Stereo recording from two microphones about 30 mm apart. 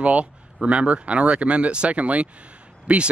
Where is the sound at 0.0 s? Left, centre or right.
Right.